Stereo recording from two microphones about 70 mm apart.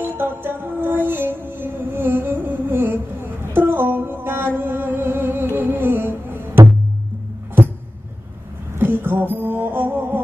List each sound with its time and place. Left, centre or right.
0.0 s music: right
8.7 s music: right